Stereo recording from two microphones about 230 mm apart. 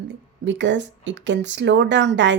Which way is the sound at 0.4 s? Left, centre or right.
Right.